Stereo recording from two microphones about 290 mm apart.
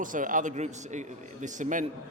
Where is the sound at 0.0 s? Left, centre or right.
Right.